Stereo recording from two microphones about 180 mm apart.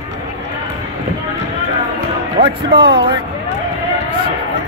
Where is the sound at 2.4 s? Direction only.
30° right (ahead or behind).